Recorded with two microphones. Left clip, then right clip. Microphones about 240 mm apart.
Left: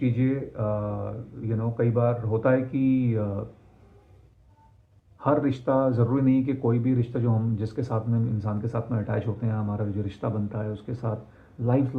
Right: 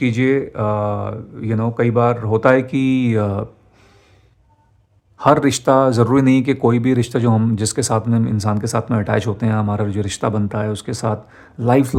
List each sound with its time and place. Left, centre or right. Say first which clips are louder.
0.0 s speech: right 11 dB; right
5.1 s speech: right 10 dB; right